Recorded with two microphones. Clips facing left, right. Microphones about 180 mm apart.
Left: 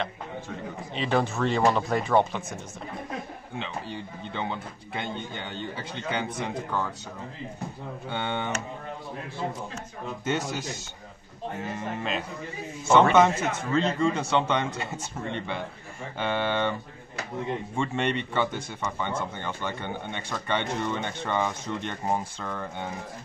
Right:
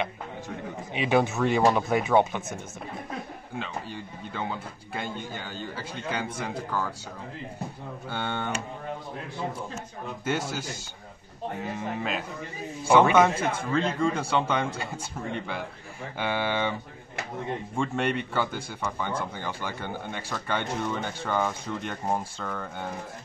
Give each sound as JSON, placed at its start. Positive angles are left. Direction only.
{"t": 0.9, "sound": "speech", "side_deg": -10}
{"t": 8.1, "sound": "speech", "side_deg": 0}
{"t": 11.6, "sound": "speech", "side_deg": 0}
{"t": 13.3, "sound": "speech", "side_deg": -30}
{"t": 13.7, "sound": "speech", "side_deg": -5}
{"t": 17.7, "sound": "speech", "side_deg": -5}